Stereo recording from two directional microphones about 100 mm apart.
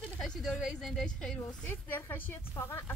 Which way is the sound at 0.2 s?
Centre (ahead or behind).